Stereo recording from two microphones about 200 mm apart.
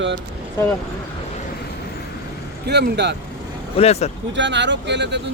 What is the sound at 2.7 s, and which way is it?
Speech, 55° right (ahead or behind).